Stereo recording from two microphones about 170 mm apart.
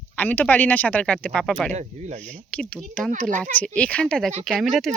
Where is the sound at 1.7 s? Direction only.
45° right (ahead or behind).